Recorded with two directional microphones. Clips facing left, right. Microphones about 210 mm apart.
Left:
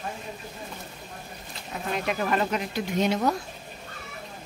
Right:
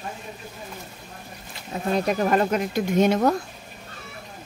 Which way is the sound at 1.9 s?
40° right (ahead or behind).